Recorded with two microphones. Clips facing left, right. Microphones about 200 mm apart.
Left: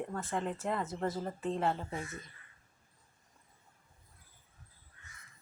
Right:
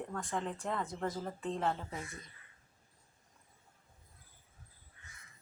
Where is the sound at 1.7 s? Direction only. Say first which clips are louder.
Left 3 dB; 25° left (ahead or behind).